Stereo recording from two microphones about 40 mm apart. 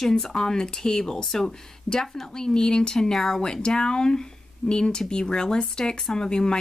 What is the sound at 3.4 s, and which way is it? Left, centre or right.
A woman's voice, left.